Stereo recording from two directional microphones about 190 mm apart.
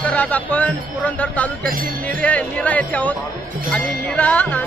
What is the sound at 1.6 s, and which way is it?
Speech, 50° right (ahead or behind).